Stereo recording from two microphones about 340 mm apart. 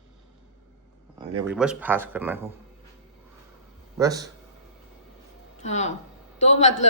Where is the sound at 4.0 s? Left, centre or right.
Centre.